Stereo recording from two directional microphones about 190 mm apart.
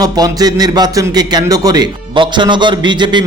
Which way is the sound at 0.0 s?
20° right (ahead or behind).